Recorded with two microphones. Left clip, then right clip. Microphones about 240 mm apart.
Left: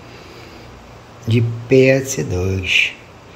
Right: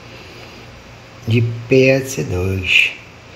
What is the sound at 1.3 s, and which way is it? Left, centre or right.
Speech, centre.